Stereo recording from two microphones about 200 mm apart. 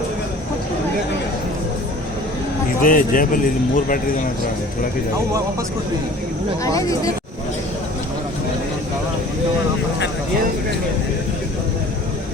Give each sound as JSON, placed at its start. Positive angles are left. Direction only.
{"t": 2.8, "sound": "speech", "side_deg": 45}
{"t": 6.7, "sound": "speech", "side_deg": 15}